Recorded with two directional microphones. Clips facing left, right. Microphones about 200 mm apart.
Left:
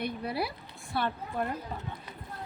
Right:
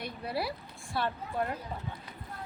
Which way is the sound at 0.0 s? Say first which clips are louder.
Left 2 dB; 55° left (ahead or behind).